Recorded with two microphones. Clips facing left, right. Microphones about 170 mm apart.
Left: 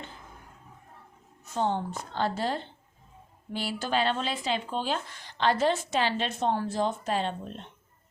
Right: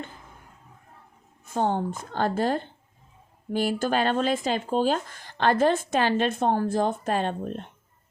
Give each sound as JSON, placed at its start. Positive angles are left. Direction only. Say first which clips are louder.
{"t": 1.5, "sound": "speech", "louder": "right 3 dB", "side_deg": -50}